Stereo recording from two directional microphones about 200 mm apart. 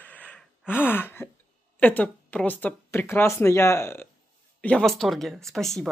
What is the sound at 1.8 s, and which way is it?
Speech, 10° left (ahead or behind).